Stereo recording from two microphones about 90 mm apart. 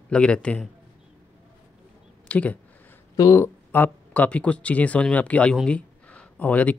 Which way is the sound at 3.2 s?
30° left (ahead or behind).